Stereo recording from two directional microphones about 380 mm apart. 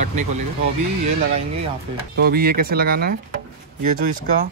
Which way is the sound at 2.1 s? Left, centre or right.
Right.